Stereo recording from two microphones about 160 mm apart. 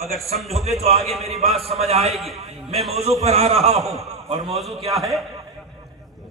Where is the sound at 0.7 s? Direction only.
40° right (ahead or behind).